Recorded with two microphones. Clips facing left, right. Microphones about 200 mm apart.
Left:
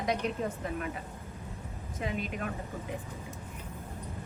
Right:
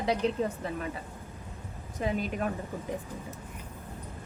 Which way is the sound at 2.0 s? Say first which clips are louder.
Right 5 dB; 40° right (ahead or behind).